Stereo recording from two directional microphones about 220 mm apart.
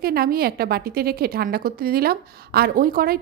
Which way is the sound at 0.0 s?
45° right (ahead or behind).